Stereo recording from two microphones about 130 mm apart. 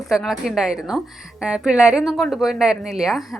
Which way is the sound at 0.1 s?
Centre (ahead or behind).